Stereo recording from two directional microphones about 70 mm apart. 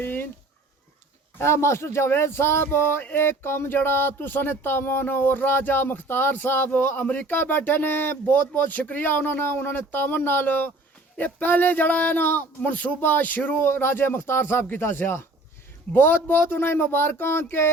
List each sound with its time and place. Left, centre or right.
0.0 s dog: left
1.4 s speech: left